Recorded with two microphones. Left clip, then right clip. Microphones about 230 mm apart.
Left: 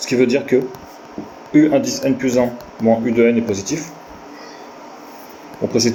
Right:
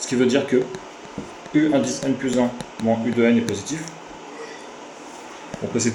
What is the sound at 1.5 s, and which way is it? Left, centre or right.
Speech, left.